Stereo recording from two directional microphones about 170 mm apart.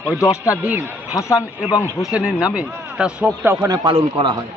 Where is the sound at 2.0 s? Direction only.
5° right (ahead or behind).